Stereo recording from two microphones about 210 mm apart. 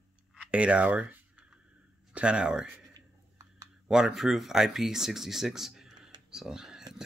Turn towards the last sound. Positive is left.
turn(degrees=-5)  # may be behind; listen again after turning